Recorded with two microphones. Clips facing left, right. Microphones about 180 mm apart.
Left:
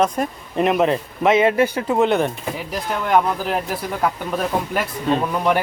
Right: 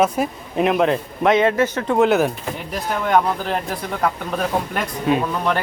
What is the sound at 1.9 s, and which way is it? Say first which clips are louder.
Speech: right 3 dB; centre (ahead or behind).